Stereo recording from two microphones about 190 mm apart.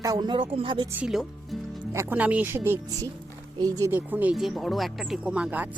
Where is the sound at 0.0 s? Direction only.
20° right (ahead or behind).